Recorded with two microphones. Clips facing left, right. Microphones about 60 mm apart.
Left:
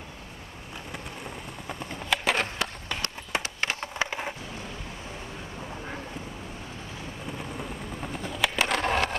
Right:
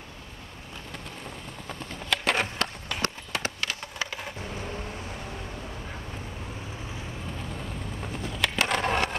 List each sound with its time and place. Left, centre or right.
0.9 s skateboard: centre
3.6 s a sound: left
8.0 s skateboard: centre